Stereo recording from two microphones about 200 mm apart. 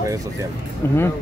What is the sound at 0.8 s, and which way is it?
Speech, 15° left (ahead or behind).